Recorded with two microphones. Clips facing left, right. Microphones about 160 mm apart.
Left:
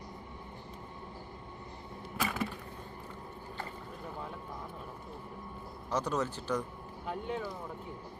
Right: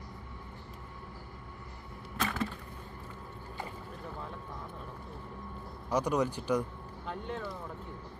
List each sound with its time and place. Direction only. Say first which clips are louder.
2.1 s a sound: right 1 dB; 10° left (ahead or behind)
5.9 s speech: right 3 dB; 10° right (ahead or behind)
7.1 s speech: left 2 dB; 10° left (ahead or behind)